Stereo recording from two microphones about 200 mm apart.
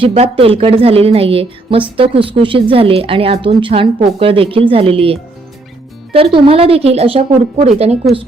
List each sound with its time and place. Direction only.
0.0 s a woman's voice: 30° right (ahead or behind)